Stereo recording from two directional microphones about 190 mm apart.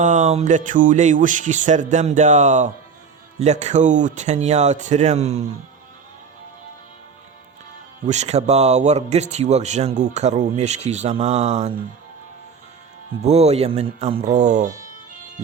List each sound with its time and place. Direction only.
0.0 s a man's voice: 40° right (ahead or behind)
8.0 s a man's voice: 35° right (ahead or behind)
13.2 s a man's voice: 35° right (ahead or behind)